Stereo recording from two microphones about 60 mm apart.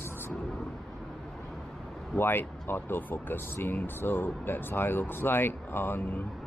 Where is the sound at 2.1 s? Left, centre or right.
Left.